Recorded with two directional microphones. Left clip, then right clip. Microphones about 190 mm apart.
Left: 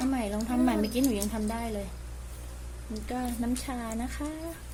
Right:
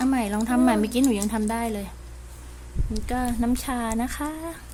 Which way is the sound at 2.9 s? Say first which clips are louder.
Right 7 dB; 30° right (ahead or behind).